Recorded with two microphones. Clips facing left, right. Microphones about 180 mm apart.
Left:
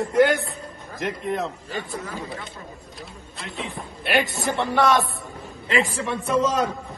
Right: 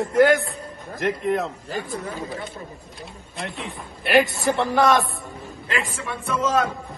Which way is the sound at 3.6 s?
Centre (ahead or behind).